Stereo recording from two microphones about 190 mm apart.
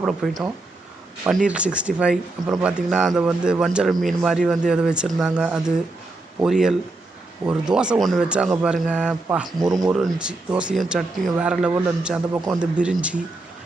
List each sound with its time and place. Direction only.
0.2 s speech: centre (ahead or behind)
1.5 s speech: 5° right (ahead or behind)